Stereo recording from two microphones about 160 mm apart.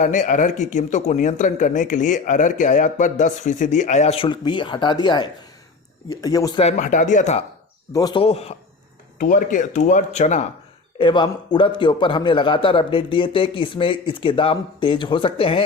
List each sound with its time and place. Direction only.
0.0 s speech: 50° left (ahead or behind); by 6.6 s 20° left (ahead or behind)
6.6 s speech: 45° left (ahead or behind)
7.9 s speech: 25° left (ahead or behind)
8.2 s a man's voice: 40° left (ahead or behind)
9.1 s speech: 55° left (ahead or behind)
10.9 s a man's voice: 30° left (ahead or behind)